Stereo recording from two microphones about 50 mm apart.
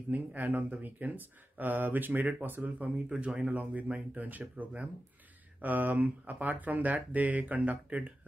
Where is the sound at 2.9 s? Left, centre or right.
Right.